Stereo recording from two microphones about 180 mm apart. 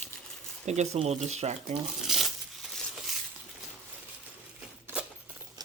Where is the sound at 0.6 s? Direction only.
40° right (ahead or behind).